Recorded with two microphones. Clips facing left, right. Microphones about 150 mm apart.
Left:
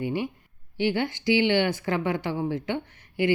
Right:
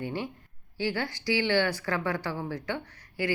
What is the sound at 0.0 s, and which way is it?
A woman's voice, 15° left (ahead or behind).